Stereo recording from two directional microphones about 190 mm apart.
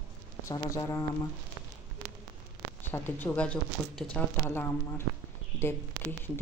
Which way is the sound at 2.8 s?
10° left (ahead or behind).